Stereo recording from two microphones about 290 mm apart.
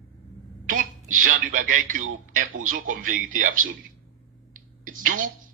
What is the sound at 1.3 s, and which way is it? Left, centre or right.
Speech, right.